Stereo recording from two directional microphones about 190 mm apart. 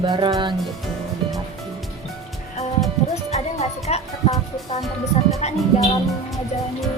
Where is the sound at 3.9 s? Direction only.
35° left (ahead or behind).